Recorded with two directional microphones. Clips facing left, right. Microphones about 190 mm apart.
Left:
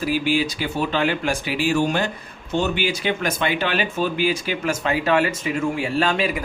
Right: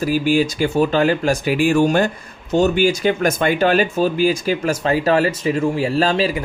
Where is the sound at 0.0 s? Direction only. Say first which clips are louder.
Right 4 dB; 45° right (ahead or behind).